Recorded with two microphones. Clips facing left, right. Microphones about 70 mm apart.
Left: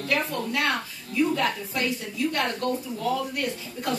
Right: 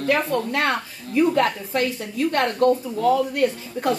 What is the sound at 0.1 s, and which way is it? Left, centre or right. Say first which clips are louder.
A woman's voice: right 5 dB; right.